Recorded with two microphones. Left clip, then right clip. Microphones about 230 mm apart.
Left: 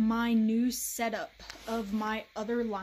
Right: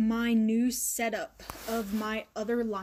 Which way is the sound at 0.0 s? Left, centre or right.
Centre.